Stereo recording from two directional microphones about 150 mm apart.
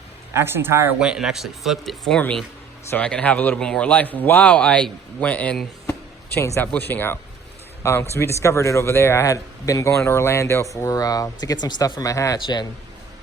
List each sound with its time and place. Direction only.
0.3 s speech: 15° right (ahead or behind)
0.9 s speech: 5° right (ahead or behind)
5.8 s a sound: 15° left (ahead or behind)
6.7 s speech: 10° left (ahead or behind)